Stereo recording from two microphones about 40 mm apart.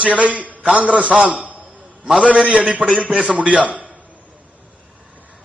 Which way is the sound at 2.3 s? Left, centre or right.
Right.